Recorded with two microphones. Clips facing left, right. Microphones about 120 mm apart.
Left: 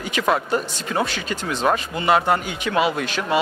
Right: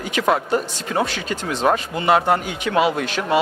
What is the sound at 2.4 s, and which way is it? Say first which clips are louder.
Speech: right 2 dB; 50° right (ahead or behind).